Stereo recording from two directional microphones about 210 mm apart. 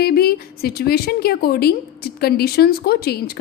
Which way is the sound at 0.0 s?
45° left (ahead or behind).